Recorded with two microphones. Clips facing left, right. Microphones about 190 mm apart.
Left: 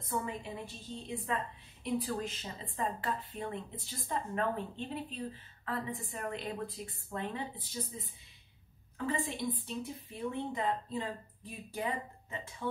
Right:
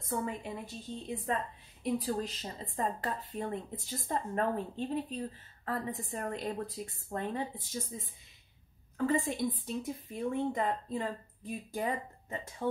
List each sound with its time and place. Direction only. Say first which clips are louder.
0.0 s a woman's voice: right 2 dB; 45° right (ahead or behind)